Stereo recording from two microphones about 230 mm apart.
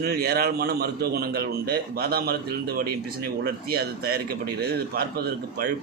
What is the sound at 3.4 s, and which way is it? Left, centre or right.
Speech, right.